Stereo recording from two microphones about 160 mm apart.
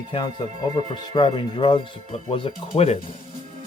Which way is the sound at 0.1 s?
25° left (ahead or behind).